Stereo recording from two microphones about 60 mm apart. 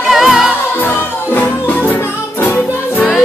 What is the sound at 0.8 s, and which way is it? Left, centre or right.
Music, left.